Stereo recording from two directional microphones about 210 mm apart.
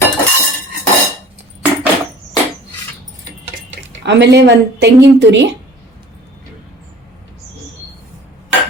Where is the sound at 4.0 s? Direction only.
55° right (ahead or behind).